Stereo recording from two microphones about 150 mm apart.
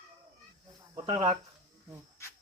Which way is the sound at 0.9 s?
30° right (ahead or behind).